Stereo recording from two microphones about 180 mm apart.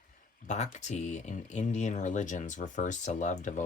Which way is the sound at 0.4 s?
40° left (ahead or behind).